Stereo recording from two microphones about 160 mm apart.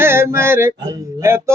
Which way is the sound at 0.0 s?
15° right (ahead or behind).